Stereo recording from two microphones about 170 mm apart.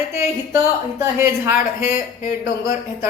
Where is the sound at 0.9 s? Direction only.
20° right (ahead or behind).